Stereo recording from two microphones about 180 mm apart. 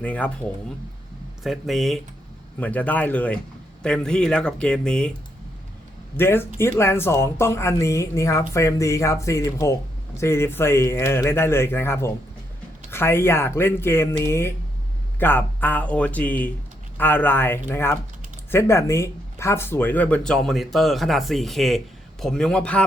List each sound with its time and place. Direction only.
0.0 s speech: 10° left (ahead or behind)
1.5 s speech: centre (ahead or behind)
6.1 s speech: 10° left (ahead or behind)